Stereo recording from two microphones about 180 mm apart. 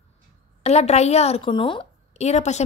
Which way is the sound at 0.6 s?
35° left (ahead or behind).